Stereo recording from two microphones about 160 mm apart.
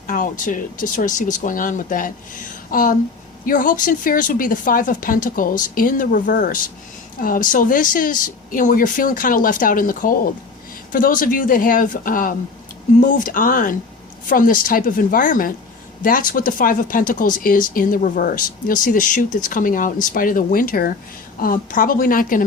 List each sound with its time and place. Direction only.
0.1 s speech: 55° left (ahead or behind)